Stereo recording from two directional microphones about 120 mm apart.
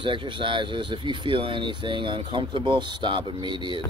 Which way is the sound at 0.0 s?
45° right (ahead or behind).